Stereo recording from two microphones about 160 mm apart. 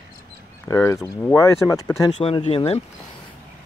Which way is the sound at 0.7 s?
20° left (ahead or behind).